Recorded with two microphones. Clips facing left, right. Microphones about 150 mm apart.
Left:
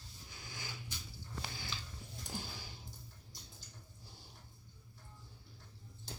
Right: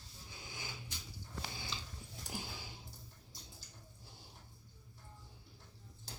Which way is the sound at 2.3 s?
20° right (ahead or behind).